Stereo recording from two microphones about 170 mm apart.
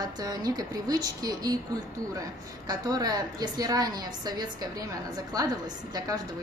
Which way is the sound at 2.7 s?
20° right (ahead or behind).